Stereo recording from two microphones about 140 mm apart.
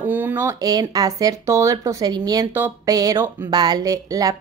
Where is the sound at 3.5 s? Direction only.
30° right (ahead or behind).